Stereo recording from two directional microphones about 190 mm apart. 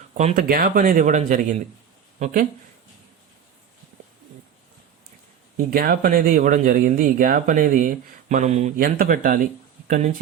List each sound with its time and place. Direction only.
0.1 s speech: 40° right (ahead or behind)
5.7 s speech: 50° right (ahead or behind)